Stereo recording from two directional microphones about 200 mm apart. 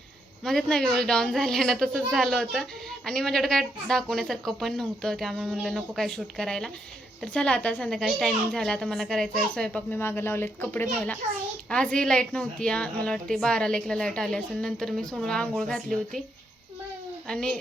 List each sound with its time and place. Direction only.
0.4 s a woman's voice: centre (ahead or behind)
17.2 s a woman's voice: 5° left (ahead or behind)